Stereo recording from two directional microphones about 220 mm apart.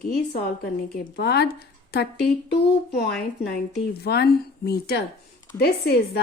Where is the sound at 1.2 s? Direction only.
50° left (ahead or behind).